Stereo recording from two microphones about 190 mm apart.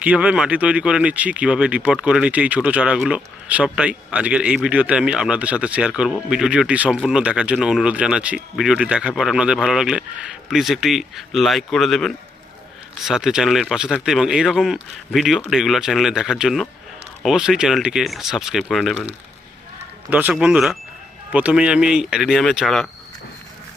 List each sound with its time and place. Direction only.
0.0 s speech: 5° right (ahead or behind)
20.1 s speech: 10° right (ahead or behind)